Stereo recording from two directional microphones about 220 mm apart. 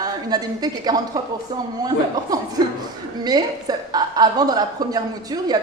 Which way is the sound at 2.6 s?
20° right (ahead or behind).